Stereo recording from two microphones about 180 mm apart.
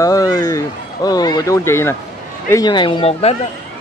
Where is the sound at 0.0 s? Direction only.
20° left (ahead or behind).